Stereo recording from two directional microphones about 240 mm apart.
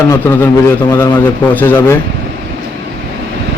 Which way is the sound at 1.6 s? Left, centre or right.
Centre.